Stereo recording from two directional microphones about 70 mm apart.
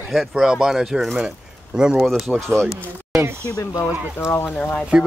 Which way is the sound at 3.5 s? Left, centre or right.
Left.